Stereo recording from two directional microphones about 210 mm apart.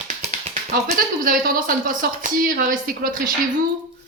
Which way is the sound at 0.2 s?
30° right (ahead or behind).